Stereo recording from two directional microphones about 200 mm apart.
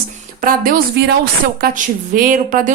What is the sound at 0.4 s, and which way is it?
A woman's voice, 45° right (ahead or behind).